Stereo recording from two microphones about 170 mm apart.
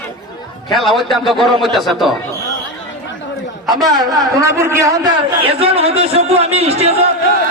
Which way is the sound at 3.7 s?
25° right (ahead or behind).